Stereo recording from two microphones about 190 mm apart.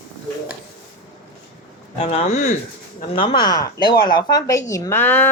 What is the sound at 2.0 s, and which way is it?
A woman's voice, 35° left (ahead or behind).